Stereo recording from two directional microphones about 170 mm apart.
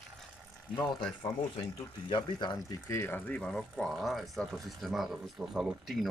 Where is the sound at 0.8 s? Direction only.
25° left (ahead or behind).